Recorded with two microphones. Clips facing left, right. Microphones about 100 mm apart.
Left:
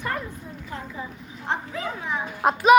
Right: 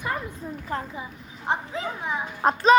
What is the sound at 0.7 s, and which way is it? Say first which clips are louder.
Speech: right 5 dB; 45° right (ahead or behind).